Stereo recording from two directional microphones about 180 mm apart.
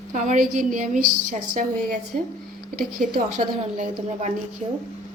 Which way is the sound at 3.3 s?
40° right (ahead or behind).